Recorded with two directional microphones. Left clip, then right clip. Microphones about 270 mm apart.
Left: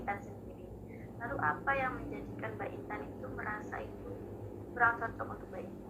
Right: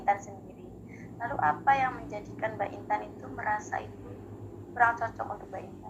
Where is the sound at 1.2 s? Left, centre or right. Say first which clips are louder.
Right 8 dB; right.